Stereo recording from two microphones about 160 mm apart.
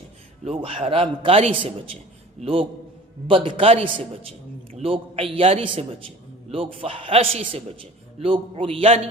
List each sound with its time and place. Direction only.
0.4 s a man's voice: 35° right (ahead or behind)